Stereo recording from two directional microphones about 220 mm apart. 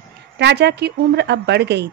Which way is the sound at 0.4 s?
50° right (ahead or behind).